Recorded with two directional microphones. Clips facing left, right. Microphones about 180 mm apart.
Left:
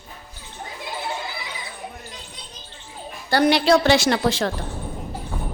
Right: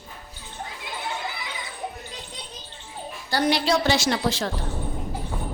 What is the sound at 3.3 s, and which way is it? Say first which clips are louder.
A woman's voice: left 5 dB; 65° left (ahead or behind).